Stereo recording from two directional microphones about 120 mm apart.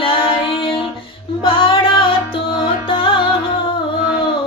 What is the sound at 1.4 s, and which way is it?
Music, 45° left (ahead or behind).